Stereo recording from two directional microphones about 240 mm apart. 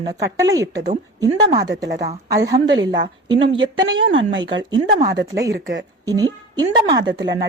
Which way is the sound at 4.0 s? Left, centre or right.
Right.